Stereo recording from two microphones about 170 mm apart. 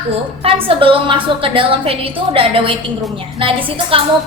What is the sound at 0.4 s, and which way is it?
A woman's voice, 30° right (ahead or behind).